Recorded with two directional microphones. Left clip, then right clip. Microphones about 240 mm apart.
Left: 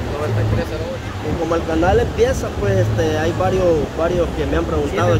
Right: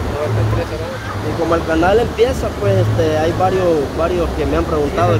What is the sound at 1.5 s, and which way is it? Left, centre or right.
Speech, right.